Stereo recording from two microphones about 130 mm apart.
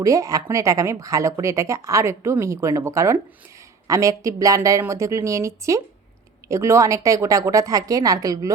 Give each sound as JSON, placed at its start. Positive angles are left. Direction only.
{"t": 0.0, "sound": "speech", "side_deg": -25}